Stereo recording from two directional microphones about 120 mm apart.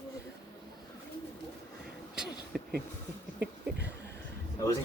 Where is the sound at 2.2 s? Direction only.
5° right (ahead or behind).